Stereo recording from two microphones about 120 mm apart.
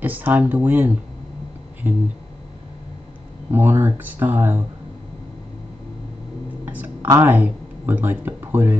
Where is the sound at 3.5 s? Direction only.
20° right (ahead or behind).